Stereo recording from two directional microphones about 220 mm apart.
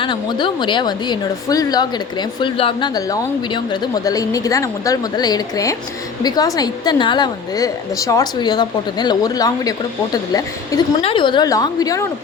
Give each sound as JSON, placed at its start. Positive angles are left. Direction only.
{"t": 0.0, "sound": "a woman's voice", "side_deg": 20}